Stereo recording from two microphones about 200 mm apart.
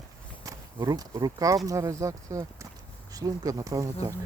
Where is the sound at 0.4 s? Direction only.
15° right (ahead or behind).